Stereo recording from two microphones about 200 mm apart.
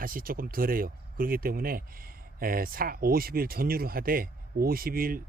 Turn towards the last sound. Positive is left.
turn(degrees=-45)  # may be behind; listen again after turning